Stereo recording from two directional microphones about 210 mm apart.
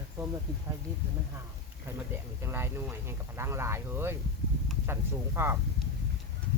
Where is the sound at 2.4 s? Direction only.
10° right (ahead or behind).